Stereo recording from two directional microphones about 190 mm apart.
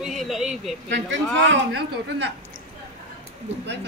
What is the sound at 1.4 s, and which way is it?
Speech, 70° right (ahead or behind).